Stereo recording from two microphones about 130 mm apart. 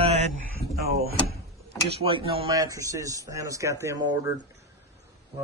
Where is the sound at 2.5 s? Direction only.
25° right (ahead or behind).